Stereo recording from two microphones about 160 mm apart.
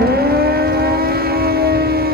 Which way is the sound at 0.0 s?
75° right (ahead or behind).